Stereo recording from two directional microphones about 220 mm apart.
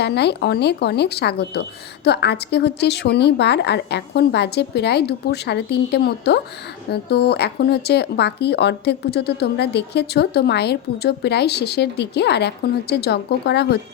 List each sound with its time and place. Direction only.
0.0 s speech: 50° left (ahead or behind)